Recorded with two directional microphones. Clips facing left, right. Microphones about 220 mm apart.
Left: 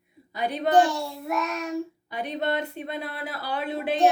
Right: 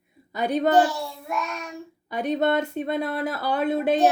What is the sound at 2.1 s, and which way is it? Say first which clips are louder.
Speech: right 6 dB; 45° right (ahead or behind).